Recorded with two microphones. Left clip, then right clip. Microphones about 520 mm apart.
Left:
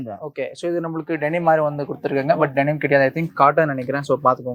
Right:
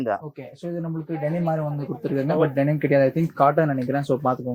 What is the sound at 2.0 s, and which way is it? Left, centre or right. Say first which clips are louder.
Speech: left 3 dB; left.